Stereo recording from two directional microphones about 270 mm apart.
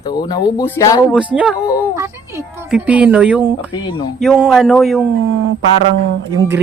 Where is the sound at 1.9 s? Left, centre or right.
Centre.